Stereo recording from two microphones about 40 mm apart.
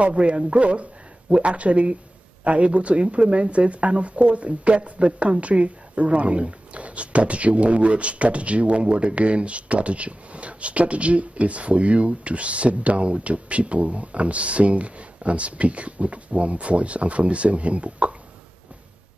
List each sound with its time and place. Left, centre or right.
0.0 s speech: right